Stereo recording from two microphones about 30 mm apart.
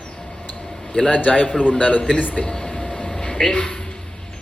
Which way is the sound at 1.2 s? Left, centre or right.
Left.